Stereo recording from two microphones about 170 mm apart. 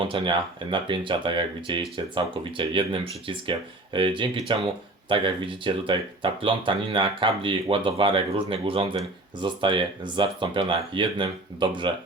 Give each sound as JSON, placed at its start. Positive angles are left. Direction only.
{"t": 0.0, "sound": "speech", "side_deg": -30}